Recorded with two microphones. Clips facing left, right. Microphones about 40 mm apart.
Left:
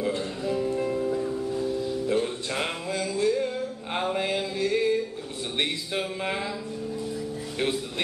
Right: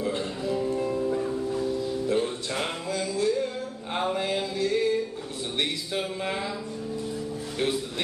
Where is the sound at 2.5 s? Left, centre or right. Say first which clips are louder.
Even; centre.